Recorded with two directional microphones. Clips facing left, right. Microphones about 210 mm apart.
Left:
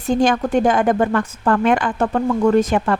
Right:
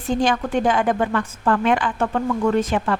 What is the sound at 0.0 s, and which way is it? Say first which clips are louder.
A woman's voice: left 4 dB; 45° left (ahead or behind).